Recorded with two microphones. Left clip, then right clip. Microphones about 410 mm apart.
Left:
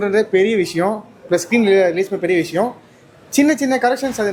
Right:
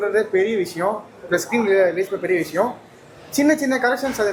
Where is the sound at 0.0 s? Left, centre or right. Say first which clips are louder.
Left 4 dB; left.